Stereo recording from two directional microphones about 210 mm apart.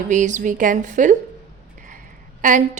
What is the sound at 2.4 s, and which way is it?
Speech, 40° right (ahead or behind).